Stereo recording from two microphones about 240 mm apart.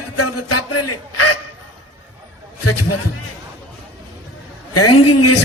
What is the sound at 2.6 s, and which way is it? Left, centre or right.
Speech, left.